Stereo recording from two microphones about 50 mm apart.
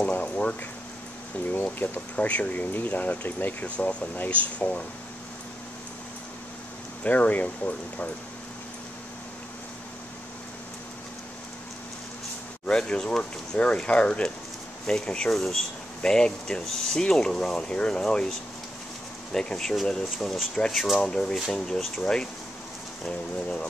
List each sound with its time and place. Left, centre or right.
0.0 s a sound: left
1.5 s speech: left
2.1 s speech: left
7.0 s speech: left
12.6 s speech: centre
19.3 s speech: centre
21.0 s speech: centre
23.0 s speech: centre